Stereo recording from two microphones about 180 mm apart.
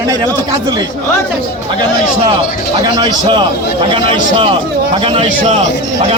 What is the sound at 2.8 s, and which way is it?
Speech, 25° right (ahead or behind).